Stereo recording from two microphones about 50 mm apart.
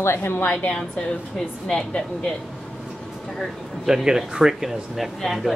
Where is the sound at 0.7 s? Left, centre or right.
Centre.